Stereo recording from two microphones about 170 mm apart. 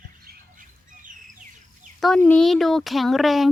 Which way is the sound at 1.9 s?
Centre (ahead or behind).